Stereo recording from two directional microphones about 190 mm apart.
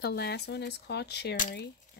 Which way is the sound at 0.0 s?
55° left (ahead or behind).